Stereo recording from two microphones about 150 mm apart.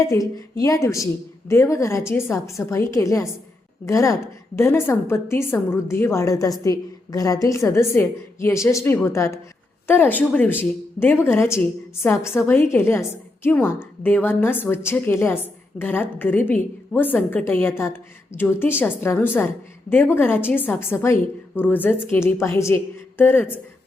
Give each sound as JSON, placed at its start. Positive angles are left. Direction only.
{"t": 0.0, "sound": "a woman's voice", "side_deg": 20}